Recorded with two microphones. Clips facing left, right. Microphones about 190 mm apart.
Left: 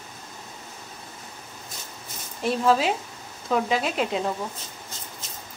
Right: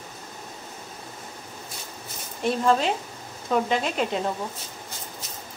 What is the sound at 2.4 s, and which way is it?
Speech, centre (ahead or behind).